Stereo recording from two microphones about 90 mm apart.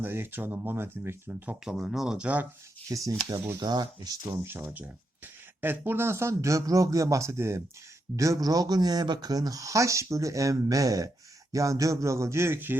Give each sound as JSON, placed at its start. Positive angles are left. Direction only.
{"t": 0.0, "sound": "speech", "side_deg": -25}
{"t": 1.6, "sound": "speech", "side_deg": -5}
{"t": 2.9, "sound": "speech", "side_deg": -40}
{"t": 3.6, "sound": "speech", "side_deg": -50}
{"t": 4.4, "sound": "speech", "side_deg": -25}